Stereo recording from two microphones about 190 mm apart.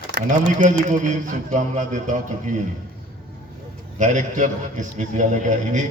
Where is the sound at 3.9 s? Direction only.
40° right (ahead or behind).